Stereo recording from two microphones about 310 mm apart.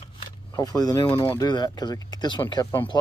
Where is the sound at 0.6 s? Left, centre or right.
Centre.